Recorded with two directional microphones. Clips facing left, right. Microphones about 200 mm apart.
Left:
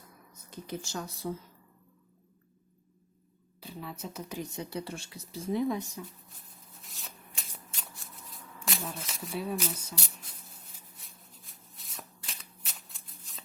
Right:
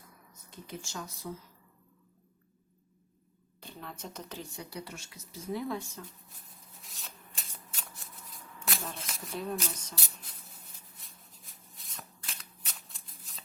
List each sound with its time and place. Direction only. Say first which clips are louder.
0.8 s speech: left 4 dB; 35° left (ahead or behind)
3.6 s speech: left 3 dB; 5° left (ahead or behind)
6.8 s shuffling cards: left 1 dB; centre (ahead or behind)
8.5 s speech: left 2 dB; centre (ahead or behind)
11.7 s shuffling cards: left 1 dB; centre (ahead or behind)